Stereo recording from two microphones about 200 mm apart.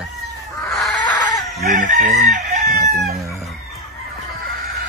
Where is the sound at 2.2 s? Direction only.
50° right (ahead or behind).